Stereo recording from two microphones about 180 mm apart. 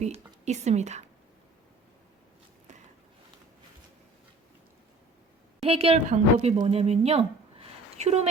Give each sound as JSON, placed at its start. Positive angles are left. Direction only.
{"t": 0.4, "sound": "speech", "side_deg": -40}
{"t": 5.6, "sound": "a woman's voice", "side_deg": -35}